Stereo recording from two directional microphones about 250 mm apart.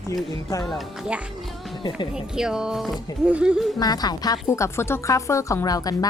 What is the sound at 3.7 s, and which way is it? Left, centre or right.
A woman's voice, centre.